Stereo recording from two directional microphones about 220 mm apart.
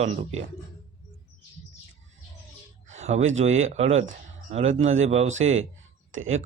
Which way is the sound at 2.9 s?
30° right (ahead or behind).